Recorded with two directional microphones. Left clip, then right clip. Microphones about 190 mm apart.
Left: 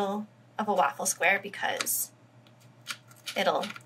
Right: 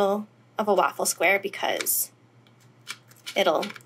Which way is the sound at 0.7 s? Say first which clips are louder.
Right 4 dB; 45° right (ahead or behind).